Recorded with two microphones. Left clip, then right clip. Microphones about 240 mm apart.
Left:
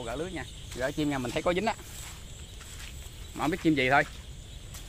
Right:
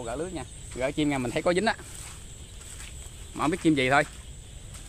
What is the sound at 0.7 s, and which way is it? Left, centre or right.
Speech, centre.